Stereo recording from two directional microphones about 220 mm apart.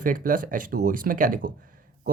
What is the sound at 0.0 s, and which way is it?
Speech, 40° right (ahead or behind).